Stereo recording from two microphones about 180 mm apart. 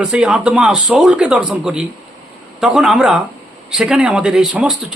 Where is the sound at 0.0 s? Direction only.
5° right (ahead or behind).